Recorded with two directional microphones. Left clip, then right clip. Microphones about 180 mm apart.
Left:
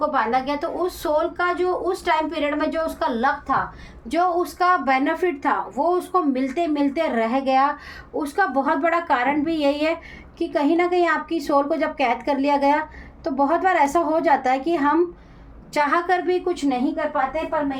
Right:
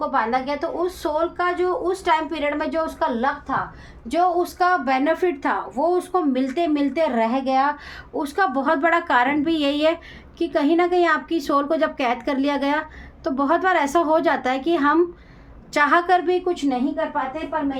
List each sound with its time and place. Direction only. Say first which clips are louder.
0.0 s a woman's voice: left 1 dB; 20° right (ahead or behind)
3.2 s a woman's voice: left 2 dB; centre (ahead or behind)
4.1 s a woman's voice: right 1 dB; 15° right (ahead or behind)
15.7 s a woman's voice: right 3 dB; 25° right (ahead or behind); by 16.8 s 10° right (ahead or behind)